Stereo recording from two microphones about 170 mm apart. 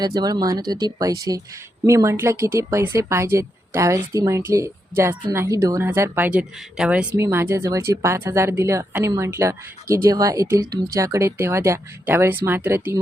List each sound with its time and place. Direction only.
0.0 s speech: 25° right (ahead or behind)